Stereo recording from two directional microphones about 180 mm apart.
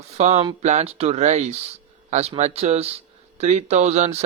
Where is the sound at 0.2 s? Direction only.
35° right (ahead or behind).